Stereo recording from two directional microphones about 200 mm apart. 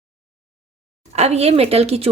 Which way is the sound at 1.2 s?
30° right (ahead or behind).